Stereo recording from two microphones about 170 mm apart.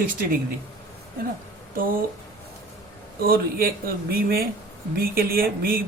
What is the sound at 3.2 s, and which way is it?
Speech, 60° right (ahead or behind).